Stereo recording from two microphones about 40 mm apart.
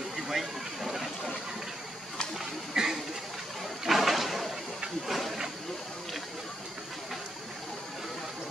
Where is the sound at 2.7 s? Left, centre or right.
Centre.